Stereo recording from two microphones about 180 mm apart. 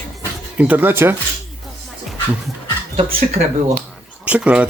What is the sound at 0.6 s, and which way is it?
Speech, 10° right (ahead or behind).